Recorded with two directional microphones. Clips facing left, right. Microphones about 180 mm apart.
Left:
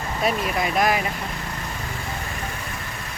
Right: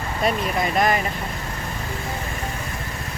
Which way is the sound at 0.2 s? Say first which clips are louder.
Right 1 dB; centre (ahead or behind).